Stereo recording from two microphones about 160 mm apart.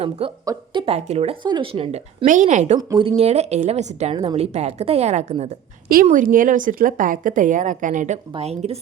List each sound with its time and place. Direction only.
0.4 s speech: 30° right (ahead or behind)
2.2 s a woman's voice: 50° right (ahead or behind)
2.7 s speech: 25° right (ahead or behind)
3.2 s a woman's voice: 40° right (ahead or behind)
5.9 s a woman's voice: 55° right (ahead or behind); by 8.8 s 40° right (ahead or behind)